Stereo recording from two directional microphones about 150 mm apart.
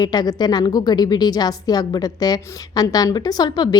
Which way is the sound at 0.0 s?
25° left (ahead or behind).